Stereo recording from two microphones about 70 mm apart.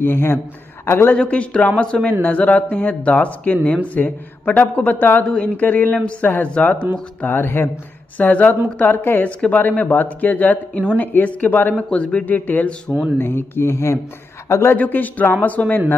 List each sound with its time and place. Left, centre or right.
0.0 s speech: left
1.1 s a man's voice: centre
5.2 s a man's voice: centre
5.6 s speech: left
8.2 s speech: left
11.7 s a man's voice: centre
12.9 s speech: right
13.2 s speech: left
14.8 s speech: left